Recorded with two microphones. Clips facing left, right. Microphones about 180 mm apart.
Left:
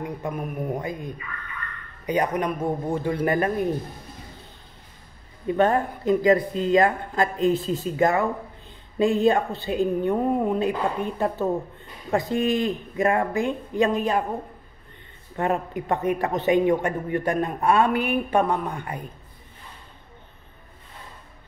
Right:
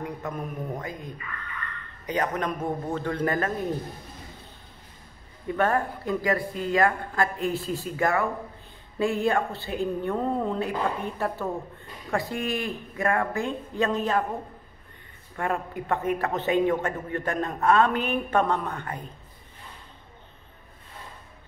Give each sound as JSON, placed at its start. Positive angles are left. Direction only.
{"t": 0.0, "sound": "a man's voice", "side_deg": 10}
{"t": 5.5, "sound": "a man's voice", "side_deg": 20}
{"t": 15.3, "sound": "a man's voice", "side_deg": 20}